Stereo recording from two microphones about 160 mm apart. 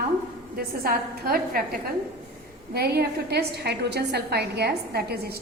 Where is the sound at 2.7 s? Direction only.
80° right.